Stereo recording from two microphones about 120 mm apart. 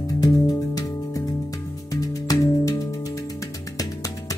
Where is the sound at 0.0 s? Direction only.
30° left (ahead or behind).